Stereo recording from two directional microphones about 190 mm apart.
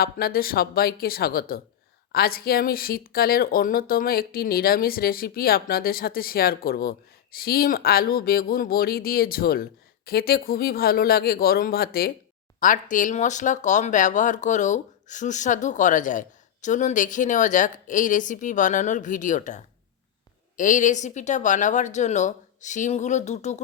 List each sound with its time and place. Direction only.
0.0 s a woman's voice: 50° left (ahead or behind)